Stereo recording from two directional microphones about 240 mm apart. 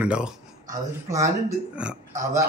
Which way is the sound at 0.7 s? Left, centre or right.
Right.